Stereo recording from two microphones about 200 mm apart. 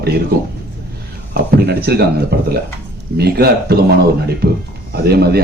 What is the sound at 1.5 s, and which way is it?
A man's voice, 50° right (ahead or behind).